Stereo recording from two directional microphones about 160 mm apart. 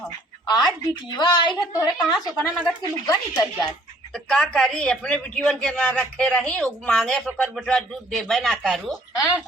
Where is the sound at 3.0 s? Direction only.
25° left (ahead or behind).